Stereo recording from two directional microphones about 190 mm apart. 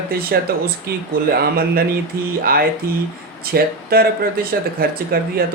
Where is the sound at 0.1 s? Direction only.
55° right (ahead or behind).